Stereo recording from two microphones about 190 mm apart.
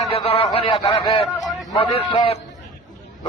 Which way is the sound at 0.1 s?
30° left (ahead or behind).